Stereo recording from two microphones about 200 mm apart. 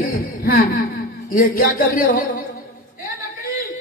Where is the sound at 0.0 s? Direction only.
45° left (ahead or behind).